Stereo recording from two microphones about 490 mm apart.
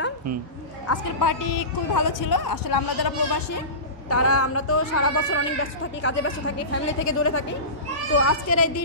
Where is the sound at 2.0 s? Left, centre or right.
Left.